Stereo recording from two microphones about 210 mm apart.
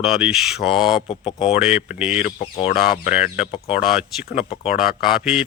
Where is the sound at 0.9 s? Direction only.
25° left (ahead or behind).